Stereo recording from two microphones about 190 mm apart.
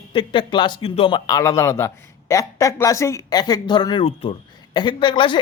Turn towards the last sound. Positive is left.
turn(degrees=25)  # may be behind; listen again after turning